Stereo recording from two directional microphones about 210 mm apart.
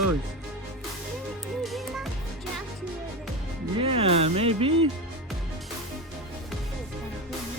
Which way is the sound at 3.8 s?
25° right (ahead or behind).